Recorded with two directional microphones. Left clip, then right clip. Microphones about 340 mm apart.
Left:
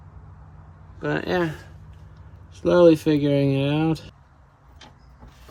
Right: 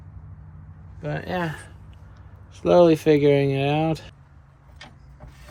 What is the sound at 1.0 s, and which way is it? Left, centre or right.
Speech, left.